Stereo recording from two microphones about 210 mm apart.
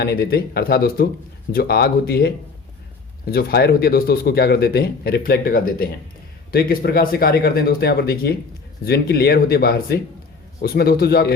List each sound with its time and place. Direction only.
0.0 s speech: 50° left (ahead or behind)